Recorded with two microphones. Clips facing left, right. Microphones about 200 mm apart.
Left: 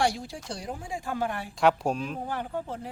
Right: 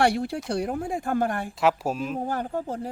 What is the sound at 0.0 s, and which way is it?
Speech, 60° right (ahead or behind).